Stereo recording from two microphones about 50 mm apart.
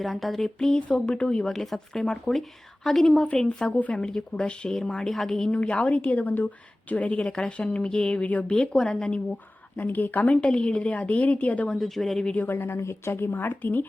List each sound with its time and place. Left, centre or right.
0.0 s speech: centre
1.5 s speech: centre
3.7 s a woman's voice: left
3.9 s speech: centre
5.5 s a woman's voice: left
6.9 s a woman's voice: left
9.7 s speech: left
10.3 s a woman's voice: centre
11.8 s speech: centre
12.5 s a woman's voice: left